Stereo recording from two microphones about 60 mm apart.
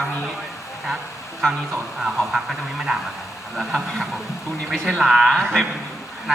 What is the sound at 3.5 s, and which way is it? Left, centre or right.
A man's voice, centre.